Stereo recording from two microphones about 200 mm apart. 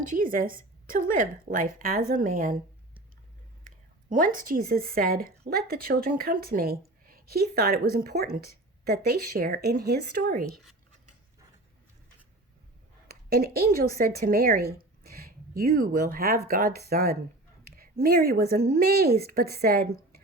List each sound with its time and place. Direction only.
0.0 s a woman's voice: 40° right (ahead or behind)
4.1 s a woman's voice: 45° right (ahead or behind)
13.1 s a woman's voice: 50° right (ahead or behind)